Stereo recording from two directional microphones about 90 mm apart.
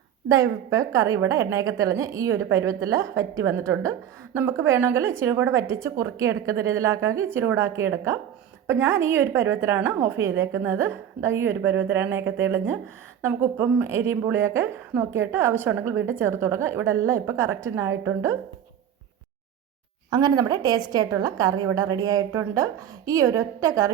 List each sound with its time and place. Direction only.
0.3 s a woman's voice: 40° right (ahead or behind)
20.1 s a woman's voice: 45° right (ahead or behind)